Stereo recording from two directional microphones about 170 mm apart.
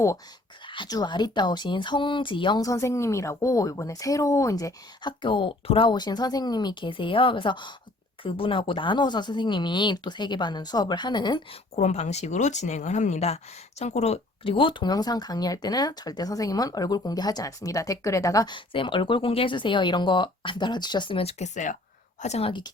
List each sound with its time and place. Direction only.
0.7 s speech: 25° left (ahead or behind)
11.7 s a woman's voice: 40° left (ahead or behind)